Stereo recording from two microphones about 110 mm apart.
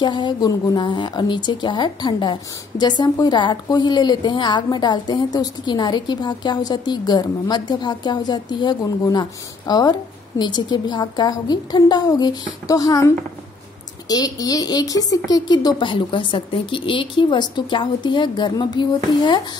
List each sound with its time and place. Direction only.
0.0 s a woman's voice: 40° left (ahead or behind)
0.8 s a woman's voice: 45° left (ahead or behind)